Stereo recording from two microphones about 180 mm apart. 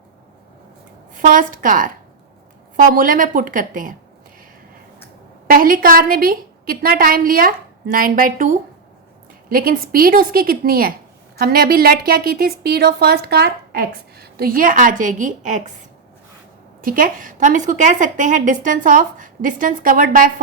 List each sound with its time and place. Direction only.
1.1 s a woman's voice: 45° right (ahead or behind)
5.5 s a woman's voice: 50° right (ahead or behind)
16.8 s a woman's voice: 50° right (ahead or behind)